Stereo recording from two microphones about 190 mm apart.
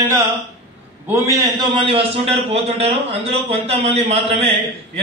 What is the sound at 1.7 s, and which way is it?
A man's voice, 25° right (ahead or behind).